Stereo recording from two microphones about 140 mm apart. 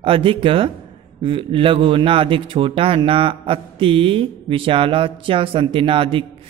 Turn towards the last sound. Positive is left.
turn(degrees=-40)  # may be behind; listen again after turning